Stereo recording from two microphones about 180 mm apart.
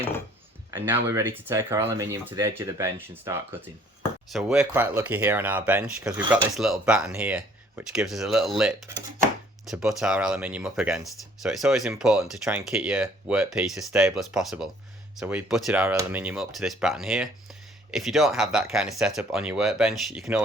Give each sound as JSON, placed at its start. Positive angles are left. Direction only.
{"t": 0.7, "sound": "speech", "side_deg": -15}
{"t": 4.3, "sound": "speech", "side_deg": 0}